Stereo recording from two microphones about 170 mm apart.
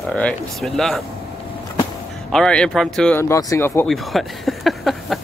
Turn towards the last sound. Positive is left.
turn(degrees=0)  # may be behind; listen again after turning